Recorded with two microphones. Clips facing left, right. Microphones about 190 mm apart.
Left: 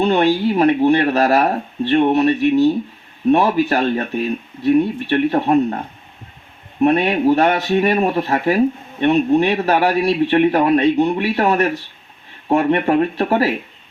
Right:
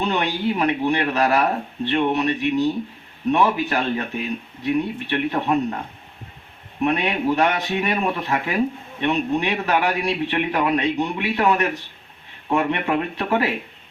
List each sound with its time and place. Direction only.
0.0 s speech: 35° left (ahead or behind)
6.8 s speech: 35° left (ahead or behind)